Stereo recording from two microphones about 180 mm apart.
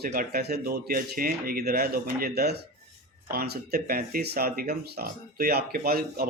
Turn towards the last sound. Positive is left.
turn(degrees=-55)  # may be behind; listen again after turning